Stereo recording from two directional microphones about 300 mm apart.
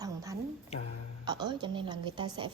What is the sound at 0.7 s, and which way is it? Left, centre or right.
Speech, left.